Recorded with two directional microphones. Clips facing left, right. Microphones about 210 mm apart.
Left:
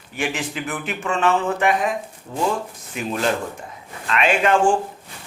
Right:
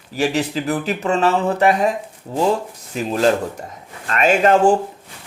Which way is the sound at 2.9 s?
35° right (ahead or behind).